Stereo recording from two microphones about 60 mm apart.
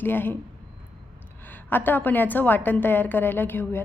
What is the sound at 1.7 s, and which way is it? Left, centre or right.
A woman's voice, left.